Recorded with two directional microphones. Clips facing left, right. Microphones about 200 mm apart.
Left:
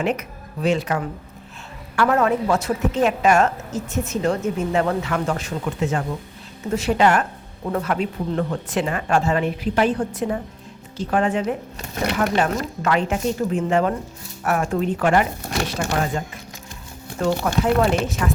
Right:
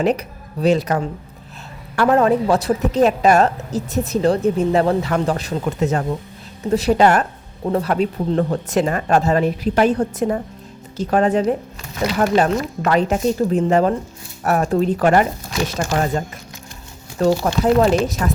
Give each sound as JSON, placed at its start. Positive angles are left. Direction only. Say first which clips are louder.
{"t": 0.0, "sound": "a woman's voice", "louder": "right 5 dB", "side_deg": -35}
{"t": 17.2, "sound": "a woman's voice", "louder": "right 4 dB", "side_deg": -35}